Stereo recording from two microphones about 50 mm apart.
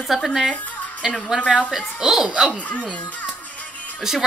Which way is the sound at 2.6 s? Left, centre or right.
Left.